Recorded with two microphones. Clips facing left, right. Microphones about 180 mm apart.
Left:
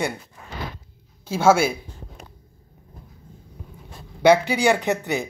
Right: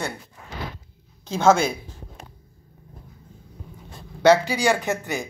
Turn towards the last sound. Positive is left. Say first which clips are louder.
# left 3 dB
turn(degrees=20)  # may be behind; listen again after turning